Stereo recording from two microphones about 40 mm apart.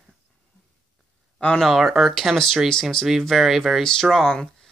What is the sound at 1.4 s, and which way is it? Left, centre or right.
Speech, left.